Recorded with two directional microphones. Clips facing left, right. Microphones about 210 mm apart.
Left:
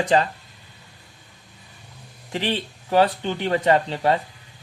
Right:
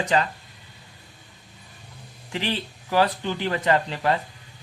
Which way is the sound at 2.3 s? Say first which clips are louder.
Left 3 dB; 35° left (ahead or behind).